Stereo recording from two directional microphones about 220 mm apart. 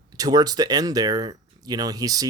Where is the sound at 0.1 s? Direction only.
15° right (ahead or behind).